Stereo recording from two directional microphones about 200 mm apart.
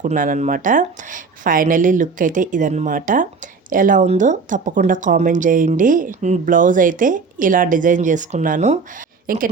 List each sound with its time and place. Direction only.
0.0 s speech: 40° right (ahead or behind)